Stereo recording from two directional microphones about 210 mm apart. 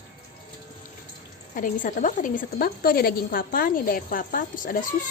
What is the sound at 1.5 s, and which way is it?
Speech, 40° left (ahead or behind).